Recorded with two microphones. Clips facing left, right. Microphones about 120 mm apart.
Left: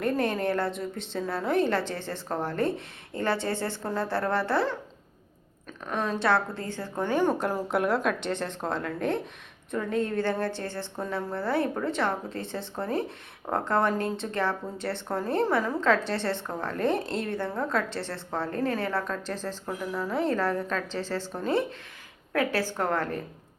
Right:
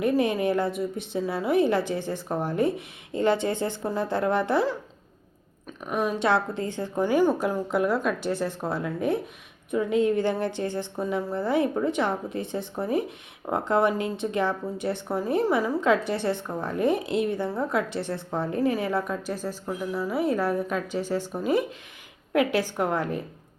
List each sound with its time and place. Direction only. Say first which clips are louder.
0.0 s speech: right 3 dB; 15° right (ahead or behind)
5.8 s speech: right 2 dB; 10° right (ahead or behind)
7.0 s speech: right 3 dB; 5° right (ahead or behind)